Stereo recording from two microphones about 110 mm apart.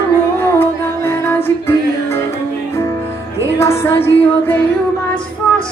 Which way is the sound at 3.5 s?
25° left (ahead or behind).